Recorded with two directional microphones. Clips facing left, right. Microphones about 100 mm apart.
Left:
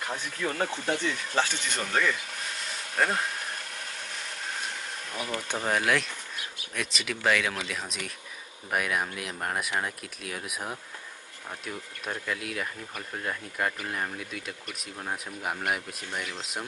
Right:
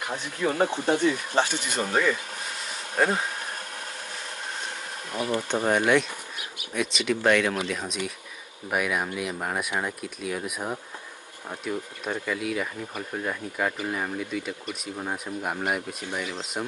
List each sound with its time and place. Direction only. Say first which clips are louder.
0.0 s speech: right 4 dB; 20° right (ahead or behind)
5.2 s speech: right 7 dB; 20° right (ahead or behind)
5.7 s speech: right 4 dB; centre (ahead or behind)